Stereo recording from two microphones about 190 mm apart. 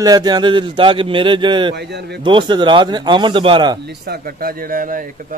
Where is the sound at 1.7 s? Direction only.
60° right (ahead or behind).